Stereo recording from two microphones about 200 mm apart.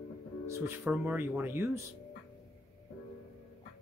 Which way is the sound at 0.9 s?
10° right (ahead or behind).